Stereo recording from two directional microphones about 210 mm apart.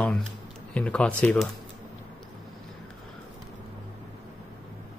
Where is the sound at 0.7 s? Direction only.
5° left (ahead or behind).